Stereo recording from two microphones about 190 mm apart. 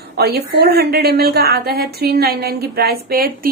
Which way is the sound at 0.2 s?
55° right (ahead or behind).